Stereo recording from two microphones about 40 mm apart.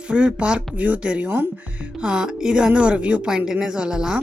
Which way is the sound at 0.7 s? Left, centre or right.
Right.